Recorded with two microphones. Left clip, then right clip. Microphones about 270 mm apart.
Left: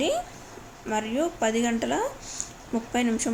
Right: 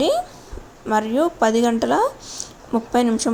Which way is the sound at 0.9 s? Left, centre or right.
Right.